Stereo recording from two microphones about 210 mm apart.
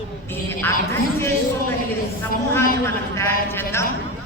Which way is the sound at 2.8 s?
10° left (ahead or behind).